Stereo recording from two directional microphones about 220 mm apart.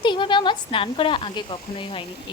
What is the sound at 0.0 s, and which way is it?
Speech, 20° left (ahead or behind).